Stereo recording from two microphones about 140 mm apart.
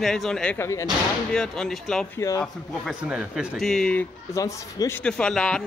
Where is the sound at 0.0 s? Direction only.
Centre (ahead or behind).